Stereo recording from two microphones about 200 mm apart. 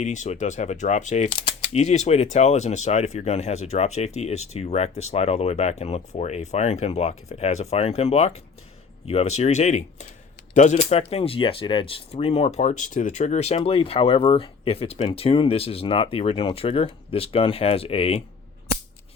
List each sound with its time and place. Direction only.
0.0 s speech: 35° left (ahead or behind)